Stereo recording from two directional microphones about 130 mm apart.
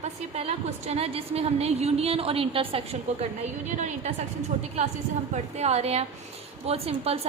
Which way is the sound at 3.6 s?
65° right (ahead or behind).